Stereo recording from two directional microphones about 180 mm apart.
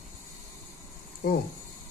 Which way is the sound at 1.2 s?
60° left (ahead or behind).